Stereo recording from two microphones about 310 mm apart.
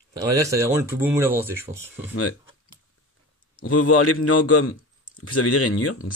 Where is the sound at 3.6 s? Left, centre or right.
Left.